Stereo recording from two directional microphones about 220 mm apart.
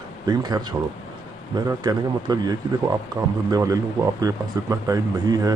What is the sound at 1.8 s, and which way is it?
Speech, 20° right (ahead or behind).